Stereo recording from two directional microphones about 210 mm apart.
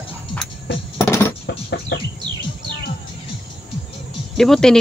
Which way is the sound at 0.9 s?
15° left (ahead or behind).